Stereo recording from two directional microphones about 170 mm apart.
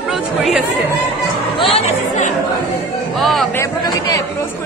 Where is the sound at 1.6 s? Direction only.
35° left (ahead or behind).